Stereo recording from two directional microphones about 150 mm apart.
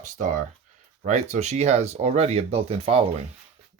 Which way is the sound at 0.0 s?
60° right (ahead or behind).